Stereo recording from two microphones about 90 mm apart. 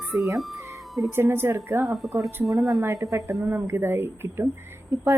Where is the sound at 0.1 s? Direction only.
30° right (ahead or behind).